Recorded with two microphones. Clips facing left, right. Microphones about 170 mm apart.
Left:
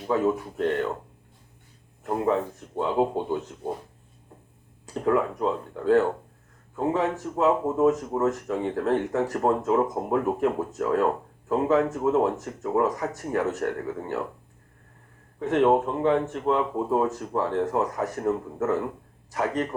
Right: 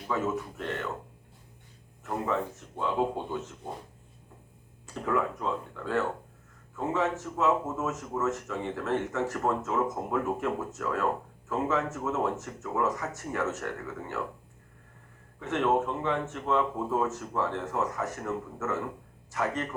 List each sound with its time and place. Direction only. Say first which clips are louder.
0.1 s speech: left 6 dB; 35° left (ahead or behind)
2.0 s speech: left 6 dB; 35° left (ahead or behind)
5.0 s speech: left 6 dB; 35° left (ahead or behind)
15.4 s speech: left 6 dB; 35° left (ahead or behind)